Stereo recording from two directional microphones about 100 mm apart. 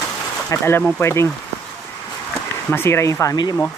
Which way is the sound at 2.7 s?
25° left (ahead or behind).